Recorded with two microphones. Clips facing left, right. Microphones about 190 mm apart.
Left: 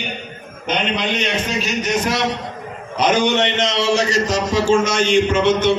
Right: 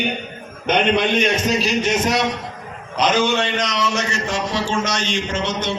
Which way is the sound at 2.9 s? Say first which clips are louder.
Left 2 dB; 10° left (ahead or behind).